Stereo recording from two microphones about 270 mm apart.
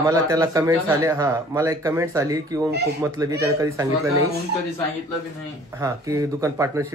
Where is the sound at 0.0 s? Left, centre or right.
Centre.